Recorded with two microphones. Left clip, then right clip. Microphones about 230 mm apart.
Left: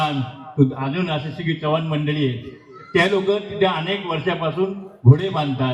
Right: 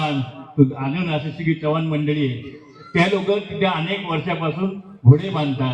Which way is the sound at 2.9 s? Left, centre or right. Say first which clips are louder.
Left 1 dB; left.